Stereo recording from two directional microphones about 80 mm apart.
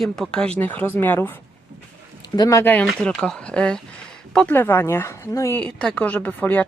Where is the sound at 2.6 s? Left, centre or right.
Centre.